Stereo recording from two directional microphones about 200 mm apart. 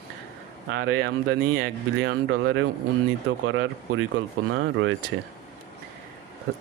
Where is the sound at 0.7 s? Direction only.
70° right (ahead or behind).